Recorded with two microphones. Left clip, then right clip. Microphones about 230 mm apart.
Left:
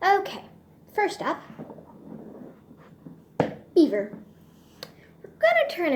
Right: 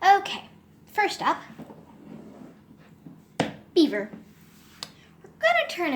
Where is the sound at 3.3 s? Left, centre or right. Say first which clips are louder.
Left 2 dB; right.